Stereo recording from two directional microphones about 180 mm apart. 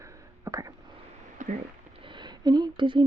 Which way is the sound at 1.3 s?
45° right (ahead or behind).